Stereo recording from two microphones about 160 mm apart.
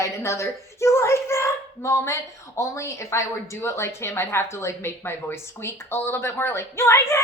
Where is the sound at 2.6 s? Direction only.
20° left (ahead or behind).